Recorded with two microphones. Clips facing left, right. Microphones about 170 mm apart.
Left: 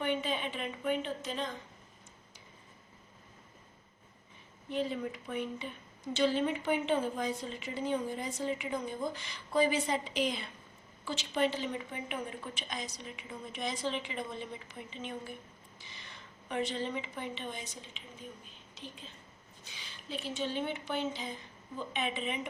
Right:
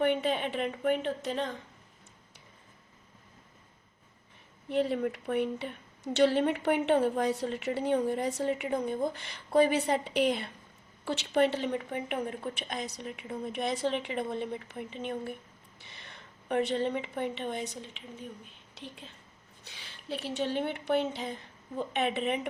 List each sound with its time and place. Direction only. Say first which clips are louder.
0.0 s a woman's voice: right 6 dB; 60° right (ahead or behind)
4.7 s a woman's voice: right 6 dB; 65° right (ahead or behind)